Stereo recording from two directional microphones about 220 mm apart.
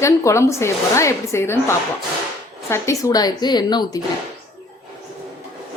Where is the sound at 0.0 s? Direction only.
15° left (ahead or behind).